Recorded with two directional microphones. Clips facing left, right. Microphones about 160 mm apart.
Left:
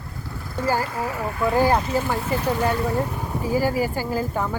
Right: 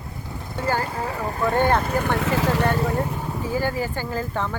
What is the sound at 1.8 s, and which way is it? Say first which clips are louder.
Speech: right 1 dB; 60° right (ahead or behind).